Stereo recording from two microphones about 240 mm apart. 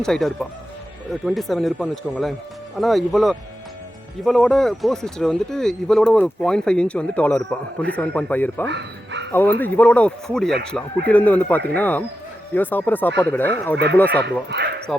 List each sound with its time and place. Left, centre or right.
0.0 s speech: centre